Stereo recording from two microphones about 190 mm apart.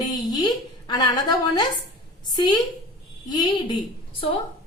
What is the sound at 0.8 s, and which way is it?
A woman's voice, 20° left (ahead or behind).